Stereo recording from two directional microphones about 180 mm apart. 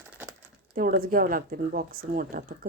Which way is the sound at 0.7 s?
50° right (ahead or behind).